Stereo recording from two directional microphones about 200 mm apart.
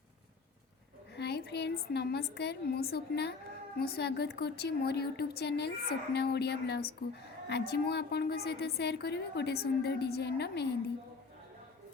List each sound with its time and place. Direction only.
1.1 s a woman's voice: 55° left (ahead or behind)